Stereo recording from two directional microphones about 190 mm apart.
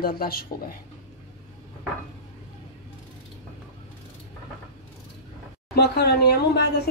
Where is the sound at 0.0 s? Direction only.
55° left (ahead or behind).